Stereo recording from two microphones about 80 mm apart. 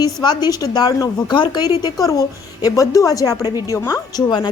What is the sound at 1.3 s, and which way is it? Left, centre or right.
A woman's voice, left.